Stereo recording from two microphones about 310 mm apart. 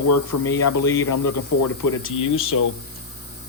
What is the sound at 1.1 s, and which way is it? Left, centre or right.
Speech, left.